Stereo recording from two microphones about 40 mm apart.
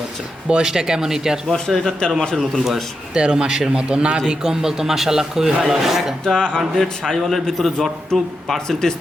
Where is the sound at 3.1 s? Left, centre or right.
Right; by 6.1 s centre.